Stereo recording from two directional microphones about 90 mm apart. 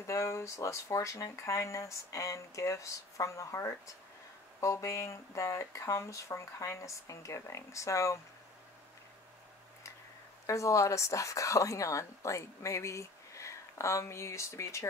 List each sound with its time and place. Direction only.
0.0 s speech: 35° left (ahead or behind)
10.4 s speech: 35° left (ahead or behind)